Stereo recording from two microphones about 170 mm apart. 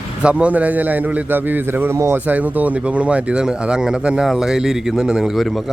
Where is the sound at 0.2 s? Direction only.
5° right (ahead or behind).